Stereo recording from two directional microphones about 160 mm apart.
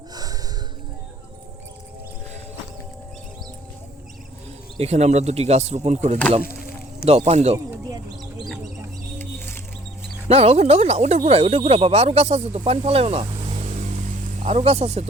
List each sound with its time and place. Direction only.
0.1 s snort: 25° right (ahead or behind)
4.8 s speech: 40° right (ahead or behind)
7.5 s a sound: 20° right (ahead or behind)
9.1 s music: 15° left (ahead or behind)
10.2 s speech: 40° right (ahead or behind)